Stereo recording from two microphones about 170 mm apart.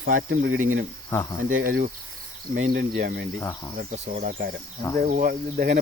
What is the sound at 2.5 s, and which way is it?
Speech, 85° right.